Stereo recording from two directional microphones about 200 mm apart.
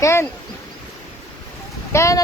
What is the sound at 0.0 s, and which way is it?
Speech, 15° left (ahead or behind).